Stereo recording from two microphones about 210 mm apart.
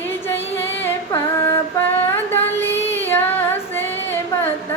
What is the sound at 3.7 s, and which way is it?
Female singing, 10° left (ahead or behind).